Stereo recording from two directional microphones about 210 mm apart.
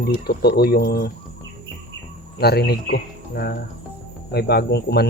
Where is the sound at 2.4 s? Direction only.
50° left (ahead or behind).